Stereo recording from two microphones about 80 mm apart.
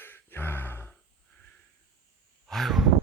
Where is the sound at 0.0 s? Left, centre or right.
Left.